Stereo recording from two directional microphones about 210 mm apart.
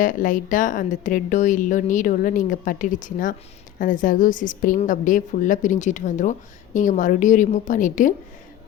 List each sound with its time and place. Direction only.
0.0 s a woman's voice: 40° left (ahead or behind)